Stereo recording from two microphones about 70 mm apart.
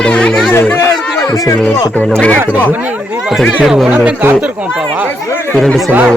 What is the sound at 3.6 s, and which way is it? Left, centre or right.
Speech, centre.